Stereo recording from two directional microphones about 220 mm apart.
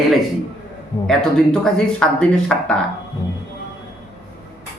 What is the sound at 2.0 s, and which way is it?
Speech, 5° left (ahead or behind).